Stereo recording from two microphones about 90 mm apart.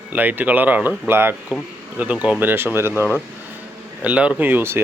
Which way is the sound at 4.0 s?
15° right (ahead or behind).